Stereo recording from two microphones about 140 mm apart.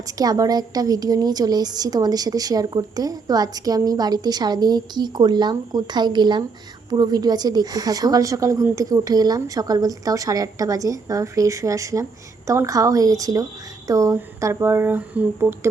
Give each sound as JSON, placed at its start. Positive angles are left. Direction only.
{"t": 0.2, "sound": "a woman's voice", "side_deg": -25}